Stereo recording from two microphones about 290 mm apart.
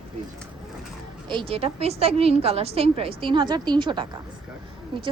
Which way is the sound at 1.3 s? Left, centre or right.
Centre.